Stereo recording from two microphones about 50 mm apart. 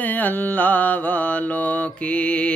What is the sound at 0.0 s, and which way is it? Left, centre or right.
Mantra, left.